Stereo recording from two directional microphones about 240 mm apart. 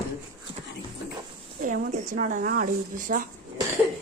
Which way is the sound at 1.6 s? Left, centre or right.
Right.